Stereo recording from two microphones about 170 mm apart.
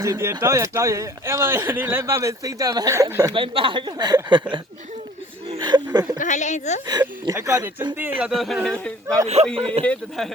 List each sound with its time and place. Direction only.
0.0 s a man's voice: 15° right (ahead or behind)
5.5 s speech: 25° right (ahead or behind)
6.1 s a woman's voice: 45° left (ahead or behind)
7.3 s speech: 20° right (ahead or behind)
8.2 s speech: centre (ahead or behind)
9.2 s speech: 40° right (ahead or behind)
9.8 s speech: 10° left (ahead or behind)